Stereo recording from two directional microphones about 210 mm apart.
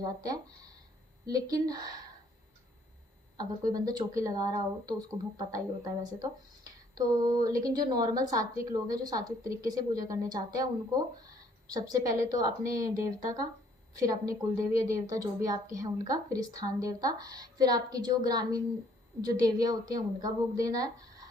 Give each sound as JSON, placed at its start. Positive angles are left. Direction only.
{"t": 0.0, "sound": "a woman's voice", "side_deg": -15}
{"t": 3.7, "sound": "a woman's voice", "side_deg": -20}